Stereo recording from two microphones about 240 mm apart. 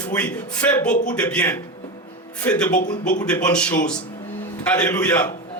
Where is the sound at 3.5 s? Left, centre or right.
Centre.